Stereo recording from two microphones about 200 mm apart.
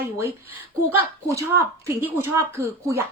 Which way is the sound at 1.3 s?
15° right (ahead or behind).